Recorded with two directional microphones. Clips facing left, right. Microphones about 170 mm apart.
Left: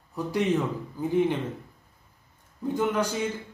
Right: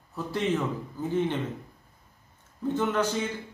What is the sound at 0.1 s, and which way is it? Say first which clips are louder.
Speech: left 2 dB; 15° left (ahead or behind).